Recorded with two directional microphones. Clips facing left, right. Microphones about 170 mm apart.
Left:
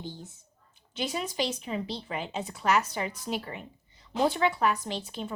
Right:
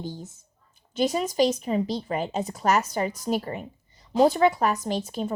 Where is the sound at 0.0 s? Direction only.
40° right (ahead or behind).